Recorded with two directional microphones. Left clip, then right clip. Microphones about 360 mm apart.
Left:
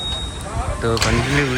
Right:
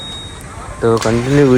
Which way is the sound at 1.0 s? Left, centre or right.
Left.